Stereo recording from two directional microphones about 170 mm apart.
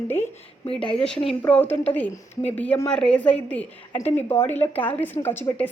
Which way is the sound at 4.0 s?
40° left (ahead or behind).